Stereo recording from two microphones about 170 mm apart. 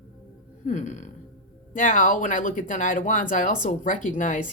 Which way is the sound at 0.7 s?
45° left (ahead or behind).